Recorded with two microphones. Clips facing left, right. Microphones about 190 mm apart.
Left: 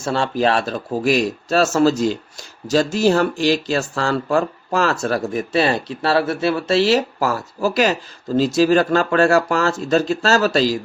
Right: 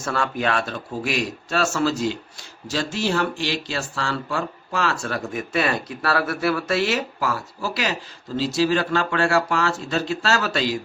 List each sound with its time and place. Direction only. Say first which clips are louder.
0.0 s speech: left 5 dB; 30° left (ahead or behind)